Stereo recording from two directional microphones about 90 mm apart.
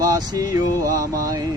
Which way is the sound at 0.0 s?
40° right (ahead or behind).